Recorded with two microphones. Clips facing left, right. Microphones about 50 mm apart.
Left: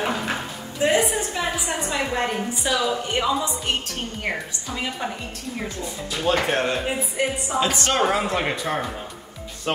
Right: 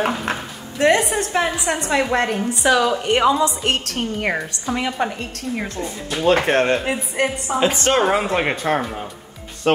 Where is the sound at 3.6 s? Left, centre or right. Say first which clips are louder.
Right 5 dB; right.